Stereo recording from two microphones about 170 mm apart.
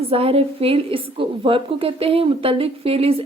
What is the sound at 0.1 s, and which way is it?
A woman's voice, 35° right (ahead or behind).